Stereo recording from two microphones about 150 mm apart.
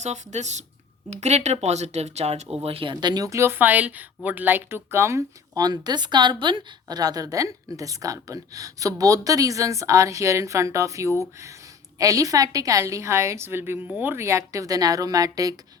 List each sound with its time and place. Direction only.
0.0 s speech: 50° right (ahead or behind); by 15.5 s 25° right (ahead or behind)